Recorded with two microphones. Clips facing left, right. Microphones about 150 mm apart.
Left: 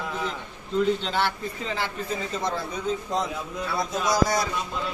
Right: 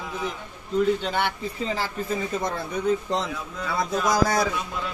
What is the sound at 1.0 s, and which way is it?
Speech, 15° right (ahead or behind).